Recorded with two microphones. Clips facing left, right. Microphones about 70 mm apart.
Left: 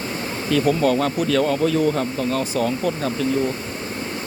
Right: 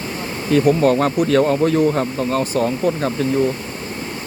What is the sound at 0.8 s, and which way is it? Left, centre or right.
Speech, right.